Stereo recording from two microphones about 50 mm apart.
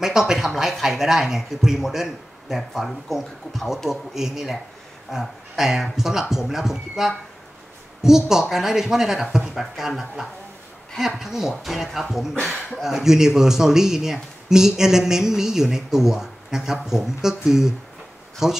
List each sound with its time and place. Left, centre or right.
0.0 s speech: centre